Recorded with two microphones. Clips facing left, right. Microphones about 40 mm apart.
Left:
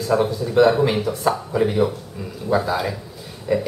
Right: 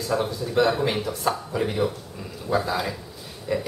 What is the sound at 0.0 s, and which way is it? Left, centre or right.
Speech, centre.